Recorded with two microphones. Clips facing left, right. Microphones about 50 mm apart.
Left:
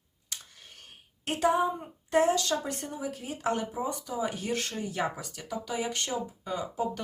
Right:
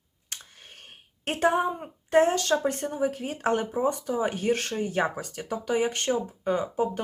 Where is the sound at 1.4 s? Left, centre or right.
Right.